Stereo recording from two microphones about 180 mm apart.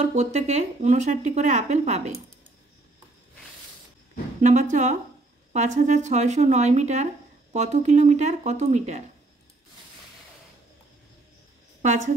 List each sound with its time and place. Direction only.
0.0 s speech: 35° right (ahead or behind)
4.4 s speech: 40° right (ahead or behind)
11.8 s a woman's voice: 40° right (ahead or behind)